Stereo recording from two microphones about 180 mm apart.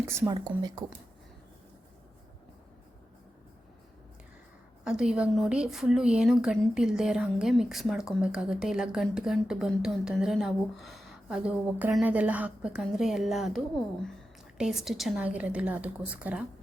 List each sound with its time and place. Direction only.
0.1 s a woman's voice: 15° right (ahead or behind)
4.8 s speech: 5° right (ahead or behind)
14.6 s a woman's voice: centre (ahead or behind)